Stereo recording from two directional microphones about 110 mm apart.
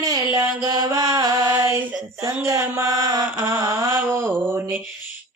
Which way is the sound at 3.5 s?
20° right (ahead or behind).